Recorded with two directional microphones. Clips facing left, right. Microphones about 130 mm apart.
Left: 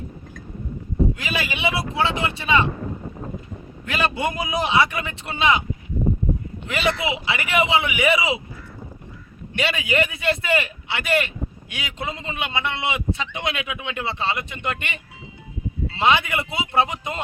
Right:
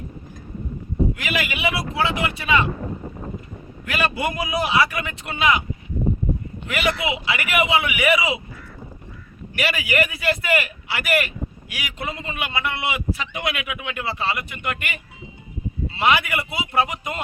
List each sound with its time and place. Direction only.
1.1 s a man's voice: 25° left (ahead or behind)
3.8 s a man's voice: 25° left (ahead or behind)
6.7 s a man's voice: 25° left (ahead or behind)
9.6 s a man's voice: 25° left (ahead or behind)